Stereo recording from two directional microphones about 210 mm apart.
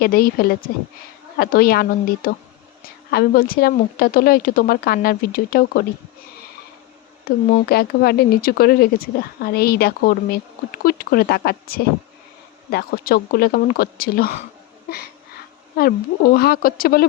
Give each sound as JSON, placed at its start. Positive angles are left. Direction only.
{"t": 0.0, "sound": "speech", "side_deg": 45}
{"t": 7.3, "sound": "speech", "side_deg": 45}